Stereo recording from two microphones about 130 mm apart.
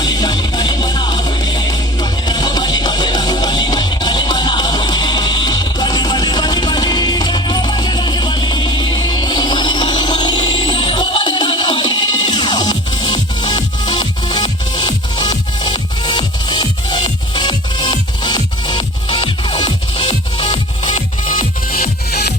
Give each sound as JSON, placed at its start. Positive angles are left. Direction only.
{"t": 0.0, "sound": "music", "side_deg": 30}
{"t": 9.0, "sound": "a sound", "side_deg": 30}
{"t": 19.1, "sound": "music", "side_deg": 35}
{"t": 20.1, "sound": "music", "side_deg": 60}